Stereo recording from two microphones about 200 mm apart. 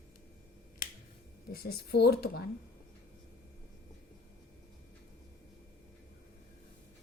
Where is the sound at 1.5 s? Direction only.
50° left (ahead or behind).